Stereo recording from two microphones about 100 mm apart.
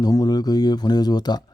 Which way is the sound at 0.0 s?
35° left (ahead or behind).